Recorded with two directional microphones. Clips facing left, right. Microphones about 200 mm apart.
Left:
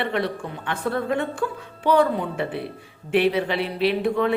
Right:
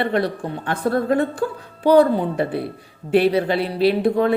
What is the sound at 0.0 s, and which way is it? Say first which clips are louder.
A woman's voice: right 4 dB; 40° right (ahead or behind).